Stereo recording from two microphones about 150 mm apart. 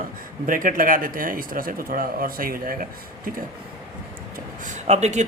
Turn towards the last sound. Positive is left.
turn(degrees=-50)  # may be behind; listen again after turning